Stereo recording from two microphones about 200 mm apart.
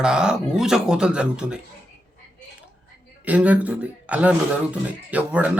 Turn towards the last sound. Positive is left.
turn(degrees=-5)  # may be behind; listen again after turning